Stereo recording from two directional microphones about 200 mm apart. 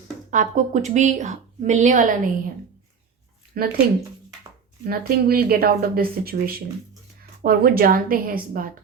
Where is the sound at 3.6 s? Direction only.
50° right (ahead or behind).